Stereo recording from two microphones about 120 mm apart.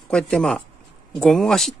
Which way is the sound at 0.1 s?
5° left (ahead or behind).